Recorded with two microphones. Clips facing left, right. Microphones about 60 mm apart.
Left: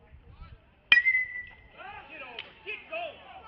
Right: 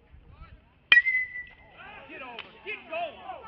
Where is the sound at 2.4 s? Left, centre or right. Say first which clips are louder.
Right 2 dB; right.